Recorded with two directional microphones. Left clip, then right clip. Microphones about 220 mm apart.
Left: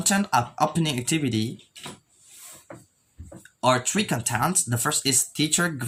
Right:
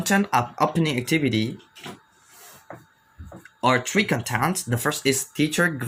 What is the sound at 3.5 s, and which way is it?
Speech, 25° left (ahead or behind).